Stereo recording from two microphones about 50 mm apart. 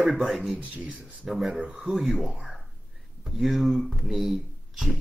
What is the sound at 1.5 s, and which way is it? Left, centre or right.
Speech, right.